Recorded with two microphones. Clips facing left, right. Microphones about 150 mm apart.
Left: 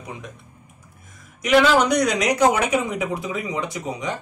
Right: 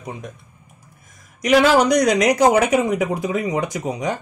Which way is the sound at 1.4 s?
40° right (ahead or behind).